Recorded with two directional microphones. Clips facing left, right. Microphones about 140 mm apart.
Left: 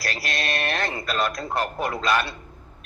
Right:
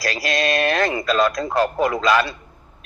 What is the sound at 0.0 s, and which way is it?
Radio, 90° right.